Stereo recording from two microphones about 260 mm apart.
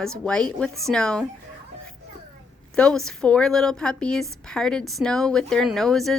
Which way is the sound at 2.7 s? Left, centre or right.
Centre.